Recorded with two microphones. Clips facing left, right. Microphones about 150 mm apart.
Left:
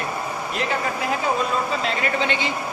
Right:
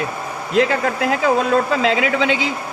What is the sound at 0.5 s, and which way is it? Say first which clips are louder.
Speech: right 9 dB; 90° right.